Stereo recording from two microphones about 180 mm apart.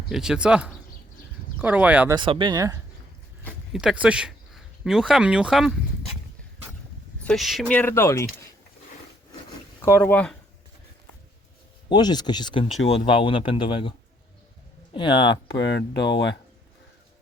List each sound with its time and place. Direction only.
0.1 s speech: 5° right (ahead or behind)
2.1 s speech: 25° right (ahead or behind)
3.7 s speech: 5° right (ahead or behind)
7.2 s speech: 5° left (ahead or behind)
9.8 s speech: 15° left (ahead or behind)
11.9 s speech: 25° left (ahead or behind)
14.9 s speech: 25° left (ahead or behind)
15.5 s speech: 75° left (ahead or behind)